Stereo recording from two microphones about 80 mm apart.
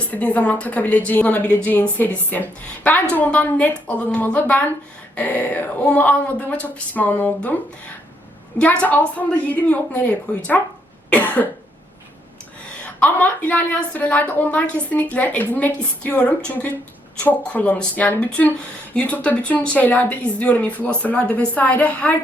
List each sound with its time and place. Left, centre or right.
0.1 s a woman's voice: centre
11.1 s cough: centre
12.8 s a woman's voice: centre